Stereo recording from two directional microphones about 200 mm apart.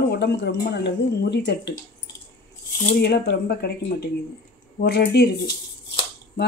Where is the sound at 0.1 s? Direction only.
60° left (ahead or behind).